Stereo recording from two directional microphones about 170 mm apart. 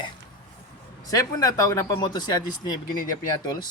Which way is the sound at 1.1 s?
20° left (ahead or behind).